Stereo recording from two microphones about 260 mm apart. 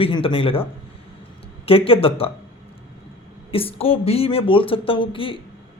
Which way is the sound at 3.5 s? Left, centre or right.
Left.